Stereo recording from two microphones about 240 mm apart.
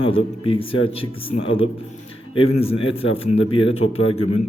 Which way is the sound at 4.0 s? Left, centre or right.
Left.